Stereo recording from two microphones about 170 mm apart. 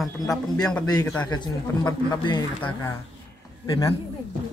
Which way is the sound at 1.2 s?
25° left (ahead or behind).